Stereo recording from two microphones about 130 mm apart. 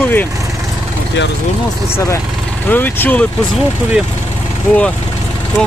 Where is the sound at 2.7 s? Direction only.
15° left (ahead or behind).